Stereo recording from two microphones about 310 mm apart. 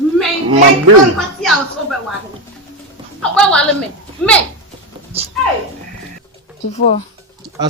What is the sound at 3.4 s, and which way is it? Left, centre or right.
Speech, centre.